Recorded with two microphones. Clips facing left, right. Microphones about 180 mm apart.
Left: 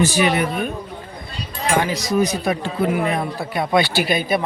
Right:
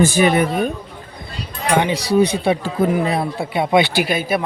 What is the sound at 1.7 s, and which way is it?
Speech, 25° right (ahead or behind).